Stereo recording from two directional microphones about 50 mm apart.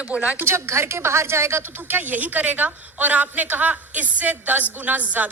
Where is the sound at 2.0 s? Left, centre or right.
Right.